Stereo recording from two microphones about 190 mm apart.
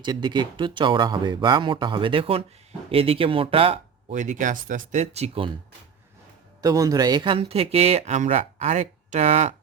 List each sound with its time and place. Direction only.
0.0 s speech: 25° right (ahead or behind)
6.6 s speech: 20° right (ahead or behind); by 9.6 s 40° right (ahead or behind)